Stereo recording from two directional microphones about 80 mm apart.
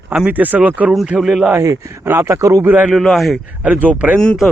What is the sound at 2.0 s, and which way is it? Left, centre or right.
Speech, right.